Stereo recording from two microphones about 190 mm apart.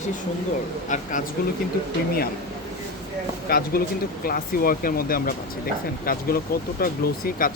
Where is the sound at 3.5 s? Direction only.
50° left (ahead or behind).